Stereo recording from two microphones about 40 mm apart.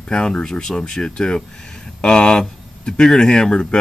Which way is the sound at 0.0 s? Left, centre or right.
Centre.